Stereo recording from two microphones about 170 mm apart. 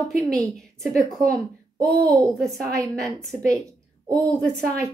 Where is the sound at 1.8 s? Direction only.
20° right (ahead or behind).